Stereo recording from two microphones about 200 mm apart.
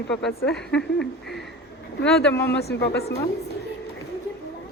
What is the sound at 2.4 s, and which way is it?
Speech, 55° left (ahead or behind).